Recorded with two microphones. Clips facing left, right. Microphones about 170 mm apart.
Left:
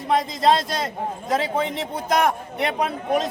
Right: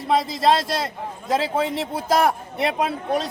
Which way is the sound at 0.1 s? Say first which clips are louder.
Even; centre (ahead or behind).